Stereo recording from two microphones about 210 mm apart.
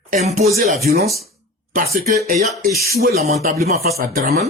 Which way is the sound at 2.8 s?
45° right (ahead or behind).